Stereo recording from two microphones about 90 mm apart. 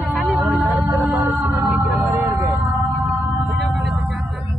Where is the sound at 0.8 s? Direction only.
20° right (ahead or behind).